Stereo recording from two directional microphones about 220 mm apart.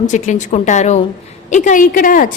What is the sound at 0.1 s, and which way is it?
A woman's voice, 35° left (ahead or behind).